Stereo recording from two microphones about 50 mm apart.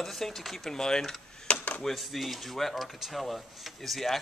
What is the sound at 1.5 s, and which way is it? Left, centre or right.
Speech, left.